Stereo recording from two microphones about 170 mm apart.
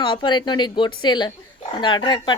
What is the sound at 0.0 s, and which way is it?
Speech, 25° left (ahead or behind).